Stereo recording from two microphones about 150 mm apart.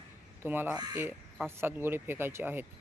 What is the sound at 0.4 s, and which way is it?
Speech, 15° right (ahead or behind).